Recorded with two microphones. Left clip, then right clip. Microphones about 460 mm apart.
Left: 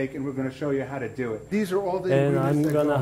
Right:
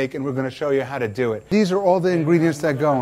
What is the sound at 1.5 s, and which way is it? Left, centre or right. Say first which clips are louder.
Speech: right 8 dB; right.